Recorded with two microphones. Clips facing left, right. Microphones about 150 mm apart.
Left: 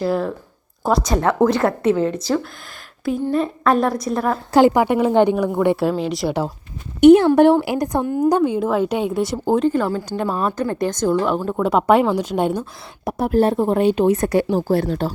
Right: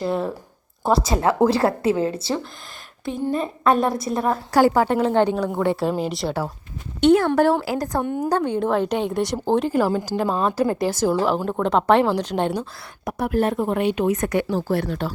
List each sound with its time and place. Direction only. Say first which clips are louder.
0.0 s a woman's voice: left 3 dB; centre (ahead or behind)
1.0 s a woman's voice: left 3 dB; 30° right (ahead or behind)
3.3 s a woman's voice: left 1 dB; centre (ahead or behind)
4.5 s a woman's voice: left 3 dB; 20° left (ahead or behind); by 6.3 s centre (ahead or behind)
7.0 s a woman's voice: left 6 dB; 20° left (ahead or behind)
8.0 s a woman's voice: left 5 dB; centre (ahead or behind)
13.1 s speech: left 4 dB; 30° left (ahead or behind)